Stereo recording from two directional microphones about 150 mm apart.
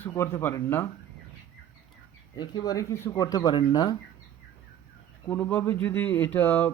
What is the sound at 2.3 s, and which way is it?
Speech, 30° left (ahead or behind).